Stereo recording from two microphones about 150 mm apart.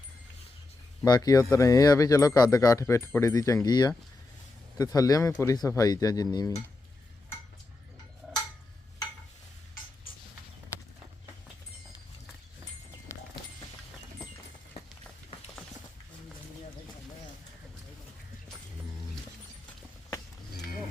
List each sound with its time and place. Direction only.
1.0 s speech: 25° left (ahead or behind)